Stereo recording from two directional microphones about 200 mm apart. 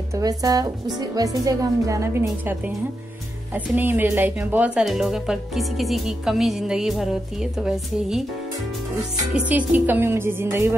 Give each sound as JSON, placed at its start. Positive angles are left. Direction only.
{"t": 0.1, "sound": "speech", "side_deg": -15}
{"t": 9.3, "sound": "speech", "side_deg": -10}